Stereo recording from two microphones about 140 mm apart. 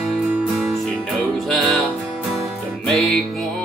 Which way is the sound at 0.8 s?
5° left (ahead or behind).